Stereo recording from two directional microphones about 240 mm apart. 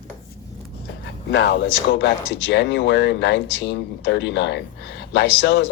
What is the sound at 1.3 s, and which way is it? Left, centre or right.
Speech, left.